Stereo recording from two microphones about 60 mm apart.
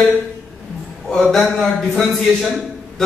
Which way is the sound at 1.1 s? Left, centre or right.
Centre.